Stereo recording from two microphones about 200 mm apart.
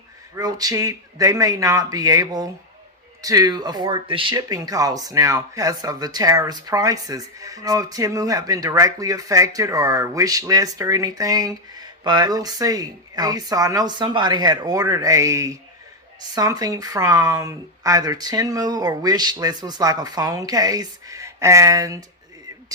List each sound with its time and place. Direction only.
0.3 s speech: 20° right (ahead or behind)